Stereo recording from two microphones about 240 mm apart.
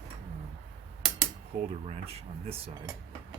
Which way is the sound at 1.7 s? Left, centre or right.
Right.